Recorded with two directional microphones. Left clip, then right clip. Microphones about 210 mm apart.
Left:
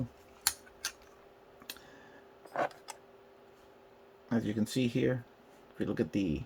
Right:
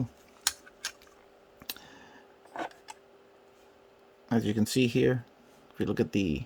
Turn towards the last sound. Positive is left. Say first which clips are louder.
# right 4 dB
turn(degrees=-55)  # may be behind; listen again after turning